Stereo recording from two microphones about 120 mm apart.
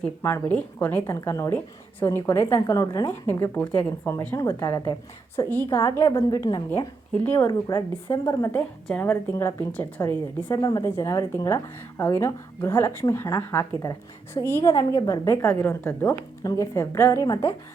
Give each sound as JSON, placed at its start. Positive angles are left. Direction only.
{"t": 0.2, "sound": "a woman's voice", "side_deg": 20}
{"t": 4.4, "sound": "a woman's voice", "side_deg": 30}
{"t": 8.5, "sound": "a woman's voice", "side_deg": 10}
{"t": 10.6, "sound": "a woman's voice", "side_deg": 35}
{"t": 10.8, "sound": "a woman's voice", "side_deg": 25}
{"t": 16.4, "sound": "a woman's voice", "side_deg": 30}